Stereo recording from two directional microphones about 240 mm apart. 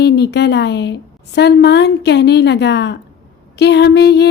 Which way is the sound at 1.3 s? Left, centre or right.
Left.